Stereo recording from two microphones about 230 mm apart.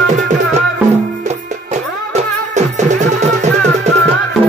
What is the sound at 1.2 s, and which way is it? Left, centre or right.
Music, right.